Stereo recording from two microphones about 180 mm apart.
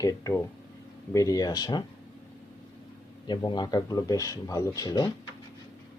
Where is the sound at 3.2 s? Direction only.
25° left (ahead or behind).